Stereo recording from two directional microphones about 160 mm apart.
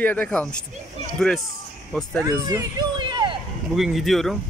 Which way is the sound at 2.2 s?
20° right (ahead or behind).